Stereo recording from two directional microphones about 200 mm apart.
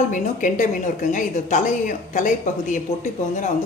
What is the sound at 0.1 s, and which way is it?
Speech, 40° left (ahead or behind).